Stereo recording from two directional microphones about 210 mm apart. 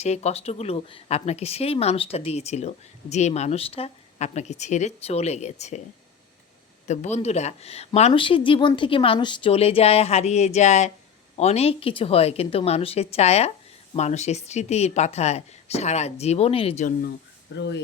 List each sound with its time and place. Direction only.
0.0 s speech: 30° left (ahead or behind)
6.8 s speech: 35° left (ahead or behind)
17.5 s speech: 55° left (ahead or behind)